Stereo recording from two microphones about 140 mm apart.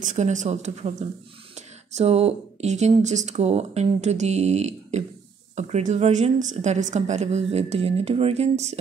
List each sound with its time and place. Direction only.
0.0 s a woman's voice: 60° right (ahead or behind)